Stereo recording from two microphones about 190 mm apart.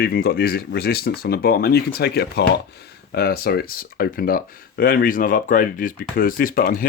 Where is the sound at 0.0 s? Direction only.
50° left (ahead or behind).